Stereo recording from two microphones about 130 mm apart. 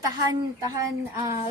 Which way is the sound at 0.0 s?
25° right (ahead or behind).